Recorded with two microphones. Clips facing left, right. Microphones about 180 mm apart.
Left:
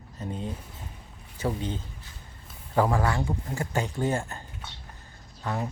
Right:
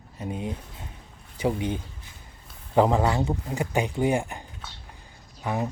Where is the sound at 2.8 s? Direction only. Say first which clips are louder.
Right 4 dB; 20° right (ahead or behind).